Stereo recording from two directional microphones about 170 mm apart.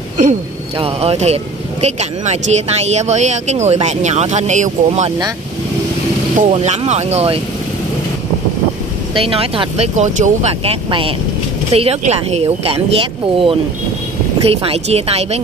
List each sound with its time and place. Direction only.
0.7 s speech: 35° right (ahead or behind)
6.3 s speech: 40° right (ahead or behind)
9.1 s speech: 35° right (ahead or behind)